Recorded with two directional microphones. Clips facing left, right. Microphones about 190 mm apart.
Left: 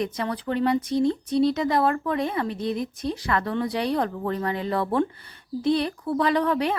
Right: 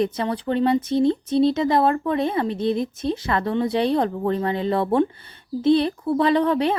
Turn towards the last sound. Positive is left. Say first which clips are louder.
# right 4 dB
turn(degrees=-25)  # may be behind; listen again after turning